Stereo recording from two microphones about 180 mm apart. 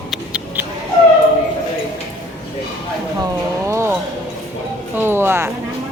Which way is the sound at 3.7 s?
15° right (ahead or behind).